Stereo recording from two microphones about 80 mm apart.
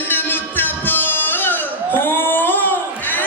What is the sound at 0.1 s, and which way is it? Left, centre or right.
Music, left.